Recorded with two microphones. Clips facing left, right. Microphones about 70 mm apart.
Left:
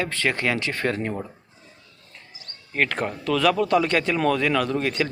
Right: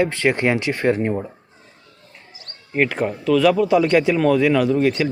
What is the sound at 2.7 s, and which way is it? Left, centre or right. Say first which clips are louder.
Speech: right 5 dB; centre.